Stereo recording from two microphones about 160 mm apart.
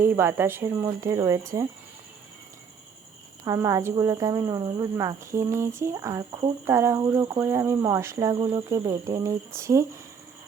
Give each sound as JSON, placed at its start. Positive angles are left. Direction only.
{"t": 0.0, "sound": "speech", "side_deg": -15}
{"t": 3.4, "sound": "speech", "side_deg": -20}